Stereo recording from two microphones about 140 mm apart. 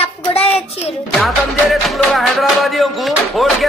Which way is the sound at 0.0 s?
45° left (ahead or behind).